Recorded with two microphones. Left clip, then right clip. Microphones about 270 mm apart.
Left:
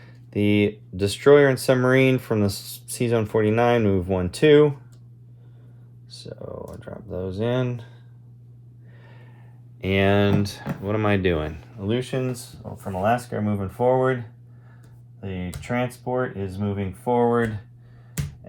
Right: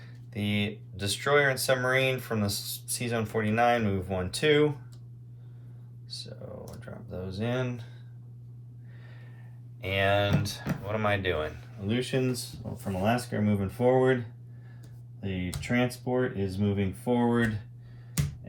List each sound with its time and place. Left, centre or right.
0.0 s a sound: left
0.9 s speech: left
6.7 s speech: left
9.8 s speech: left; by 14.2 s centre
15.2 s speech: centre